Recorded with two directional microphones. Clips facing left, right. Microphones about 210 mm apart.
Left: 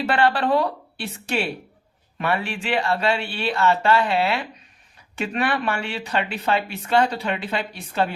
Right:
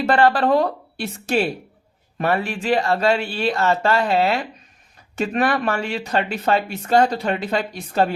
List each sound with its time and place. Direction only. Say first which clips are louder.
0.0 s a woman's voice: right 4 dB; 40° right (ahead or behind)